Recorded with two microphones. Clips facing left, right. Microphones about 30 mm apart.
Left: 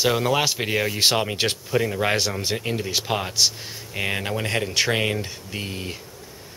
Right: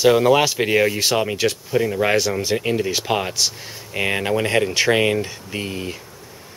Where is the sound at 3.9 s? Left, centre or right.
Centre.